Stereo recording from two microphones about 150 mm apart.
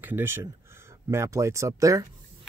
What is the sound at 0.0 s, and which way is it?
Speech, 15° right (ahead or behind).